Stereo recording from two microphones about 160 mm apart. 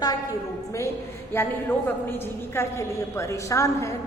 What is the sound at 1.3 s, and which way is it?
A woman's voice, 15° left (ahead or behind).